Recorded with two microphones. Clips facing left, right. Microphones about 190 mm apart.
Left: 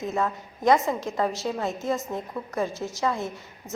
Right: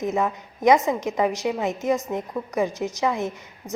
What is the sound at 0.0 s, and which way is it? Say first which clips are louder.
A woman's voice: right 3 dB; 20° right (ahead or behind).